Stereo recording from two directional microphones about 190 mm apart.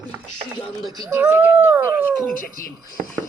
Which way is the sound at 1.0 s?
10° right (ahead or behind).